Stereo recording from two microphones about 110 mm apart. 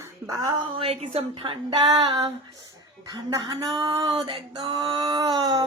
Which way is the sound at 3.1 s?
35° right (ahead or behind).